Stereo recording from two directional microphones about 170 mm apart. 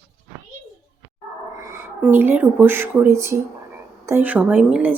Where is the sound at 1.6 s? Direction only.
15° right (ahead or behind).